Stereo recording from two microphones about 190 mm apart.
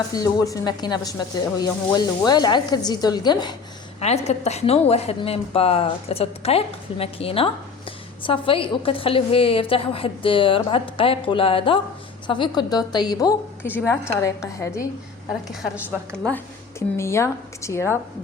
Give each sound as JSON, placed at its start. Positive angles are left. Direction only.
{"t": 0.1, "sound": "a woman's voice", "side_deg": 20}
{"t": 4.0, "sound": "a woman's voice", "side_deg": 35}